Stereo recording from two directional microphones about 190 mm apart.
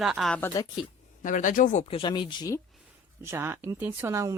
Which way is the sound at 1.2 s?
45° left (ahead or behind).